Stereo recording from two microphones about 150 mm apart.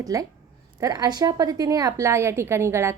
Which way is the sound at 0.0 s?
25° right (ahead or behind).